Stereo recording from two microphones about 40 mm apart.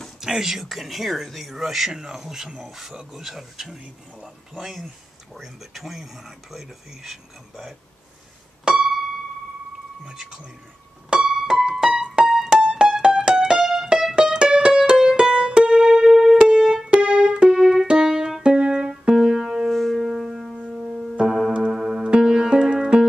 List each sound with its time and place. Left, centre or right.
0.2 s speech: centre
4.2 s a sound: centre
5.3 s speech: centre
8.6 s music: centre
11.1 s music: centre
13.6 s music: centre
14.1 s music: centre
17.0 s music: right
17.5 s keyboard: centre
17.8 s piano: centre
19.1 s keyboard: centre
19.7 s music: centre
20.5 s music: right
21.3 s music: centre